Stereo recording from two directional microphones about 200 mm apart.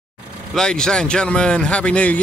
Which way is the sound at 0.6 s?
5° left (ahead or behind).